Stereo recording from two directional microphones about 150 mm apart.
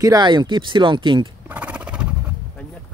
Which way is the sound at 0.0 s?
25° right (ahead or behind).